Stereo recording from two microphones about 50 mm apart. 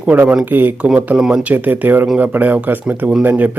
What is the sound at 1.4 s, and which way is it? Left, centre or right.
Speech, right.